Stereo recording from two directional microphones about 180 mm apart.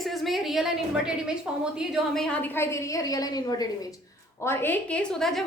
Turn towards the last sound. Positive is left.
turn(degrees=5)  # may be behind; listen again after turning